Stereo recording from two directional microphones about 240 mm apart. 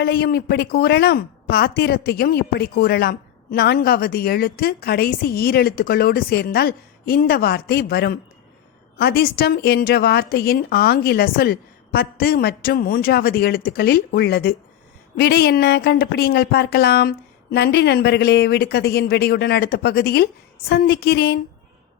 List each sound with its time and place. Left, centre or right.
0.0 s a woman's voice: left